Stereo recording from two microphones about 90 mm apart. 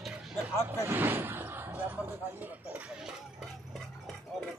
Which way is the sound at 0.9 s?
20° right (ahead or behind).